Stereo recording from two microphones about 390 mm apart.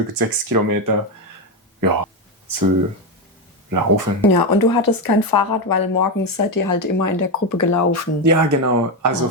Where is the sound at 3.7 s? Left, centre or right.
Right.